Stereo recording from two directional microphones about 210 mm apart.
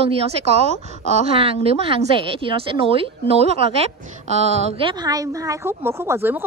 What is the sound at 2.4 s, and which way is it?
A woman's voice, 25° right (ahead or behind).